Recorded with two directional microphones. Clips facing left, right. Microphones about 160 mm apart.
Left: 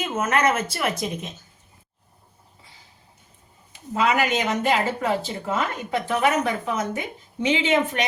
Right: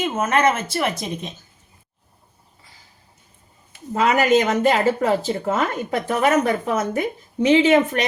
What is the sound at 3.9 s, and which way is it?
Speech, 45° right (ahead or behind).